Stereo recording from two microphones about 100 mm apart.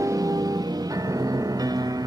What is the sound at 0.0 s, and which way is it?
Music, 35° right (ahead or behind).